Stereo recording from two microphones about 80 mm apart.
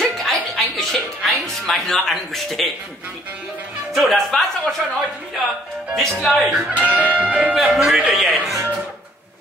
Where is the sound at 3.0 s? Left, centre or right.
Right.